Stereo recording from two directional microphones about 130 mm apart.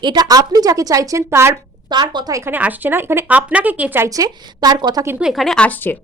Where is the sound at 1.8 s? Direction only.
35° right (ahead or behind).